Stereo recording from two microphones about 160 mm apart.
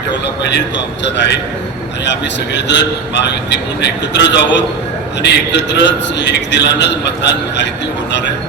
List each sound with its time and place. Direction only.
1.0 s a man's voice: 90° left